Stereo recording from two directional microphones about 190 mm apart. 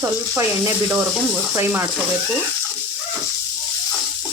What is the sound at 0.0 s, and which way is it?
Speech, 15° right (ahead or behind).